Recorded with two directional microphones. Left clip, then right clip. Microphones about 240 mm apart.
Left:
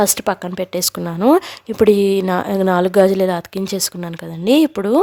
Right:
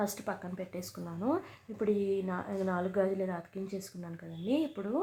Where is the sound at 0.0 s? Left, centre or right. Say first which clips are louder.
Left 19 dB; left.